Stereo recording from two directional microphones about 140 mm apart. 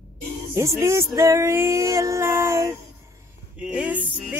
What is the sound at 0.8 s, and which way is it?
Music, 20° right (ahead or behind).